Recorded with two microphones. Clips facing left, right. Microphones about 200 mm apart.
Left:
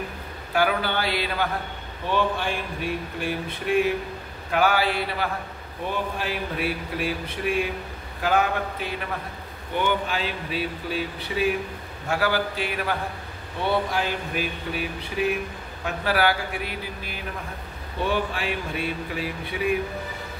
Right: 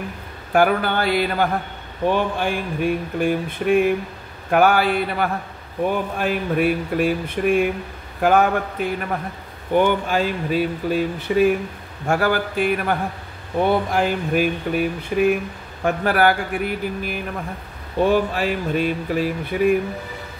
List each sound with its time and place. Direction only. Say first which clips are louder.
0.5 s speech: right 6 dB; 50° right (ahead or behind)